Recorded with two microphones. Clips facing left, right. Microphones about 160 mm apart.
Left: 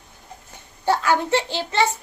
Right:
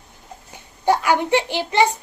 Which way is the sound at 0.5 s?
15° right (ahead or behind).